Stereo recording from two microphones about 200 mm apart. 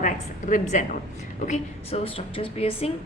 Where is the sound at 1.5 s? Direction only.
30° left (ahead or behind).